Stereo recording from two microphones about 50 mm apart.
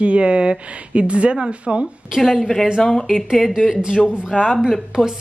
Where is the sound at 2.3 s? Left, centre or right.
Centre.